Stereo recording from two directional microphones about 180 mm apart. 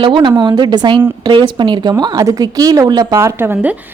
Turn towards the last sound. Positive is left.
turn(degrees=-10)  # may be behind; listen again after turning